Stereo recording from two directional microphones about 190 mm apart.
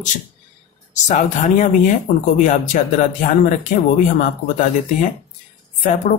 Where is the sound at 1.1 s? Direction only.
40° left (ahead or behind).